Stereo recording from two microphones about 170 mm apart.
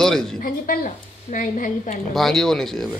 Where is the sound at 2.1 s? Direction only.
Centre (ahead or behind).